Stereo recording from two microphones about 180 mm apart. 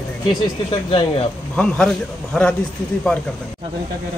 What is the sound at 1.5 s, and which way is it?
Speech, 5° left (ahead or behind).